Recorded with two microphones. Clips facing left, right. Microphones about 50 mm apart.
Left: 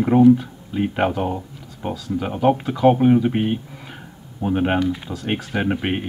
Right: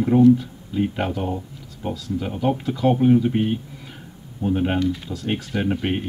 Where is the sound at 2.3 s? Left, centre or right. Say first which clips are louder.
Left 5 dB; left.